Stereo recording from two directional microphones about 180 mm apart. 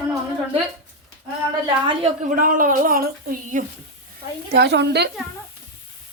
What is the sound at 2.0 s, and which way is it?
Speech, 45° right (ahead or behind).